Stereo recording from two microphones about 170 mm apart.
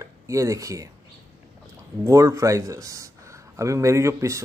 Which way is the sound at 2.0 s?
20° right (ahead or behind).